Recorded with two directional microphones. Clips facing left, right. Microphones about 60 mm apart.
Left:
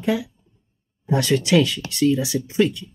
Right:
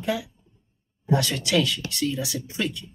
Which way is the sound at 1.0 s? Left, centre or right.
Left.